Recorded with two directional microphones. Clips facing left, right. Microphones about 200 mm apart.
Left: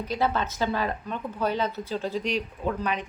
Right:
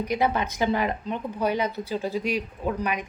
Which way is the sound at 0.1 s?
15° right (ahead or behind).